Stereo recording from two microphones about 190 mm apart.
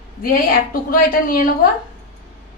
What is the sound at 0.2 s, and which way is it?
A woman's voice, 50° left (ahead or behind).